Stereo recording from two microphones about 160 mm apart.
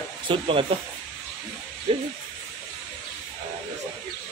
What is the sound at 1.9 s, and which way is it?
Speech, 35° right (ahead or behind).